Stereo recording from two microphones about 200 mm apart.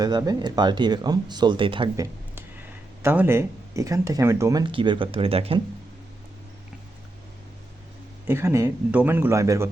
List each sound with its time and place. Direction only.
0.0 s speech: 20° right (ahead or behind)
3.0 s speech: 10° right (ahead or behind); by 5.6 s 30° right (ahead or behind)
8.3 s speech: 15° right (ahead or behind)